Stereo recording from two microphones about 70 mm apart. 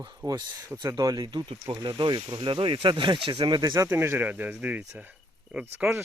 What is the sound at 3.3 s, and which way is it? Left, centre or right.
Speech, right.